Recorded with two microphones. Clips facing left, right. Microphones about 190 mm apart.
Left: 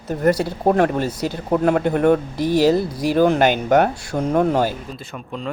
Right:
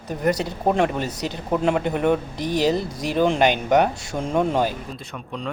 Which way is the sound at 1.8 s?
50° left (ahead or behind).